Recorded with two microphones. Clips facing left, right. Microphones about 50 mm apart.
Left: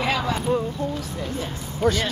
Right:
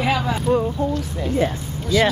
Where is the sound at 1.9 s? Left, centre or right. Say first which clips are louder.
Right 2 dB; left.